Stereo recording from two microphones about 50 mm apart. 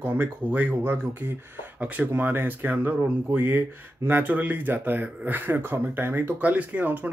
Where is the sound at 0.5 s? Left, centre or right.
Right.